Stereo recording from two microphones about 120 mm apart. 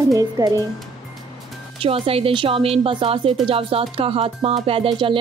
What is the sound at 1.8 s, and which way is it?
Speech, 55° right (ahead or behind).